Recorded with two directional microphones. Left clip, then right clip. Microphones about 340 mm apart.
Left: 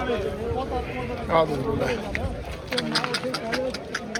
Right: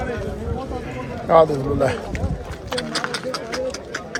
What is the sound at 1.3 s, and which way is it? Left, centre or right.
Speech, right.